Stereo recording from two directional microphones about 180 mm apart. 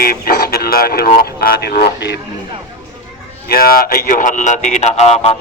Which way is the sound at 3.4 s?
55° left (ahead or behind).